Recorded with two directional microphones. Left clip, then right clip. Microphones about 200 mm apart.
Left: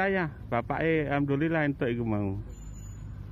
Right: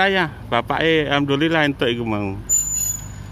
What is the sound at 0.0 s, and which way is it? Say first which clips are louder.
Speech: right 10 dB; 5° right (ahead or behind).